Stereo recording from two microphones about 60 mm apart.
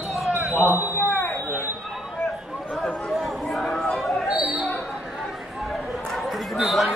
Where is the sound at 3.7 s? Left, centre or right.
Centre.